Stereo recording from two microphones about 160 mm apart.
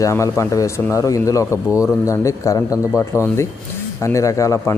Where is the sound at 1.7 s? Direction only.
10° right (ahead or behind).